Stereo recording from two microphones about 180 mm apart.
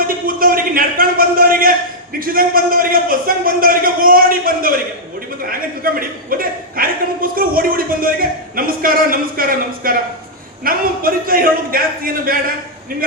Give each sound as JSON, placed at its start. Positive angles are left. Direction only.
{"t": 0.3, "sound": "a man's voice", "side_deg": -55}